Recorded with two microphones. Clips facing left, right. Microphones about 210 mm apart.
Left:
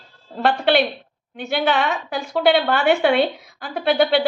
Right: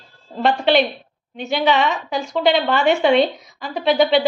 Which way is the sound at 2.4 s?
5° left (ahead or behind).